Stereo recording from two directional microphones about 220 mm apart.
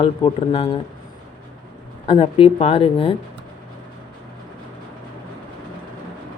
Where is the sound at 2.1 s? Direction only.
25° left (ahead or behind).